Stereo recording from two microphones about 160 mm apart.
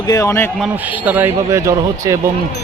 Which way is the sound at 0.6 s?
10° right (ahead or behind).